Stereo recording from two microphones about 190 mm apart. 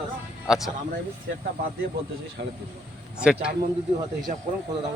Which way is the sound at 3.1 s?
5° right (ahead or behind).